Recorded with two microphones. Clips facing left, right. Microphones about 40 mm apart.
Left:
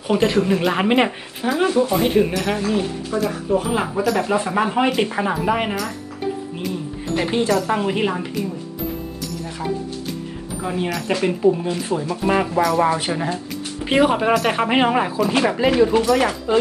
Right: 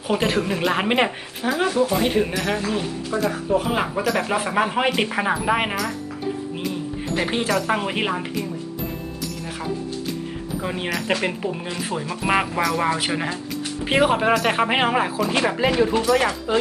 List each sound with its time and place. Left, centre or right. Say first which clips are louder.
0.2 s speech: left 4 dB; right
0.5 s speech: left 3 dB; centre
4.0 s speech: left 3 dB; centre
4.3 s speech: left 2 dB; centre
7.2 s speech: left 3 dB; right
7.4 s speech: left 3 dB; centre
8.3 s speech: left 2 dB; centre
10.6 s speech: left 3 dB; centre
12.6 s speech: left 3 dB; centre